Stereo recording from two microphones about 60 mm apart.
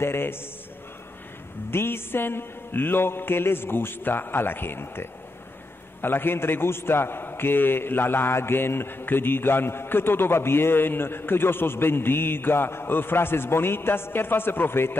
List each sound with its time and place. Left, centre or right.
0.0 s a man's voice: left
1.7 s a man's voice: left